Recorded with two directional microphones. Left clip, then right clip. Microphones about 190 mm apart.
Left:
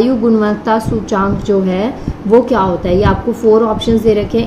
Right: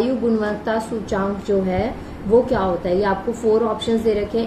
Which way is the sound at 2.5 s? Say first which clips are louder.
Left 7 dB; 50° left (ahead or behind).